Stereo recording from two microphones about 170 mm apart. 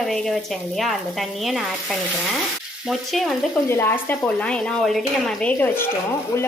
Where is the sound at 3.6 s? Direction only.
15° left (ahead or behind).